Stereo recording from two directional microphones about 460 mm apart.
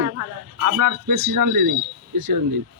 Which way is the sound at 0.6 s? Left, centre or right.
Right.